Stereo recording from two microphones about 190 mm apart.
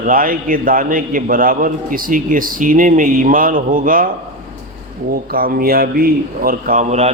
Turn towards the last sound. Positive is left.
turn(degrees=-40)  # may be behind; listen again after turning